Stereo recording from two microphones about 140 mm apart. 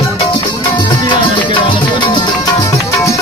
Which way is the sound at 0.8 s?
30° left (ahead or behind).